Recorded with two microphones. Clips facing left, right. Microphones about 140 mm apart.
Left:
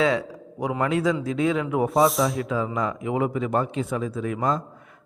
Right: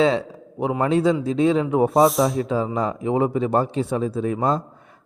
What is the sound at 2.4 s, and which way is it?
Speech, 25° right (ahead or behind).